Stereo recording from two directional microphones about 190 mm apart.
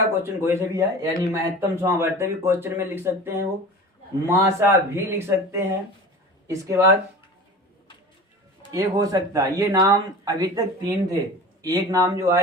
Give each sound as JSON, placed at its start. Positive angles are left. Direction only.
{"t": 0.2, "sound": "speech", "side_deg": -10}
{"t": 8.7, "sound": "speech", "side_deg": -15}